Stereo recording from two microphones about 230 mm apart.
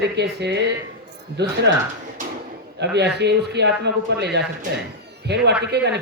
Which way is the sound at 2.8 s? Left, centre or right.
Right.